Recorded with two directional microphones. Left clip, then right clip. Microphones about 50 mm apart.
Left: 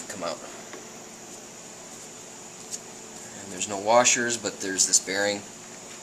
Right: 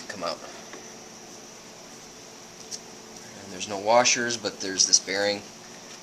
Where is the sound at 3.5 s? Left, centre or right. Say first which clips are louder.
Even; right.